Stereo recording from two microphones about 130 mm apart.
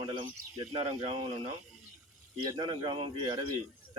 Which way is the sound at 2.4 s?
35° right (ahead or behind).